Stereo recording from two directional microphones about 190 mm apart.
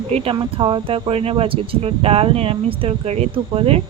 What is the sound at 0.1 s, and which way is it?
Speech, 30° right (ahead or behind).